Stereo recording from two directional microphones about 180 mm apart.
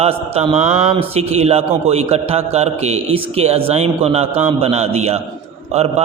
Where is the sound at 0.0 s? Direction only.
35° right (ahead or behind).